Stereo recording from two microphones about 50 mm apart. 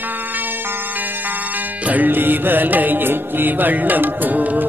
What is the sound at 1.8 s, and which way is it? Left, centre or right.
Music, right.